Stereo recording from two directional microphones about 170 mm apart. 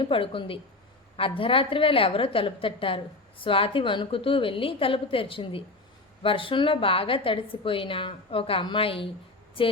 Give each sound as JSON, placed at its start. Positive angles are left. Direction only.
{"t": 0.0, "sound": "a woman's voice", "side_deg": 30}